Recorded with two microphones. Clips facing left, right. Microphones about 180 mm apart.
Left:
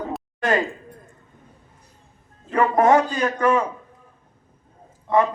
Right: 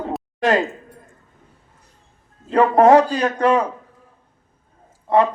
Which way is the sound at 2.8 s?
35° right (ahead or behind).